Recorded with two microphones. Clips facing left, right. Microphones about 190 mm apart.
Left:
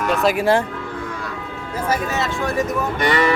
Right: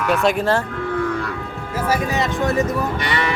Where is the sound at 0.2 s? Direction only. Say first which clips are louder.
Left 1 dB; 5° left (ahead or behind).